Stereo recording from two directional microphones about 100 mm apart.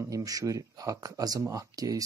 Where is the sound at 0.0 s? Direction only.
35° right (ahead or behind).